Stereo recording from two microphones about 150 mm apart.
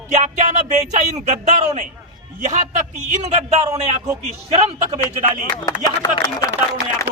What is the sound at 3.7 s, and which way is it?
Speech, 20° right (ahead or behind).